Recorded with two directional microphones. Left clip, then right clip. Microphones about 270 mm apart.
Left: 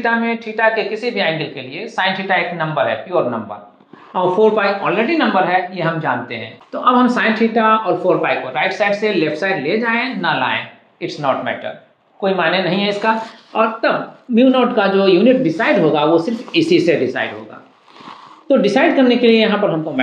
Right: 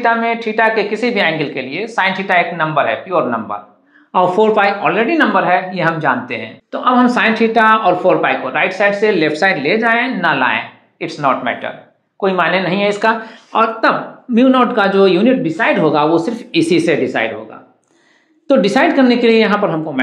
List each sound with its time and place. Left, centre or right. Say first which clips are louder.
0.0 s speech: right 4 dB; right
18.5 s speech: right 1 dB; right